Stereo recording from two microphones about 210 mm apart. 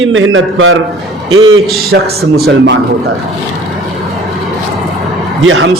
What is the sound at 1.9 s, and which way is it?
Speech, 50° right (ahead or behind).